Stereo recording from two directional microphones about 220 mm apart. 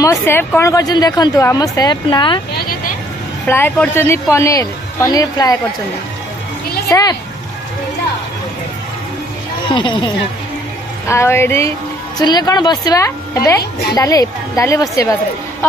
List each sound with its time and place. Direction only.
0.0 s a woman's voice: 10° left (ahead or behind)
3.4 s a woman's voice: 10° left (ahead or behind)
6.9 s a woman's voice: 15° left (ahead or behind)
9.7 s a woman's voice: 20° left (ahead or behind)